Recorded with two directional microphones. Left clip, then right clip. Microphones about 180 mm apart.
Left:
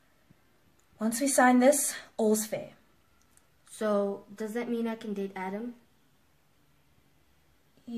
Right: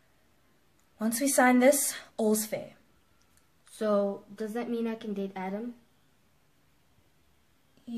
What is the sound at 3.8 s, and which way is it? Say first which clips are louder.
A woman's voice: right 1 dB; 45° right (ahead or behind).